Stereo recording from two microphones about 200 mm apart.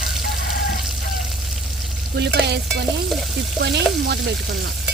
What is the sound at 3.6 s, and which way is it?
Frying, 55° right (ahead or behind).